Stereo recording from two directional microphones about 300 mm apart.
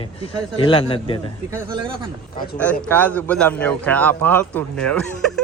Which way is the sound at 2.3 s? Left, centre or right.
Left.